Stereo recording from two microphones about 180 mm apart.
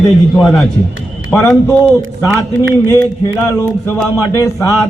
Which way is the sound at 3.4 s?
15° left (ahead or behind).